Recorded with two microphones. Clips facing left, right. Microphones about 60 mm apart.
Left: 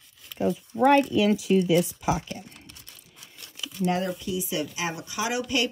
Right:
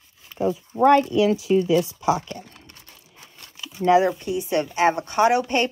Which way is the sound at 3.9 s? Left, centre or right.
Right.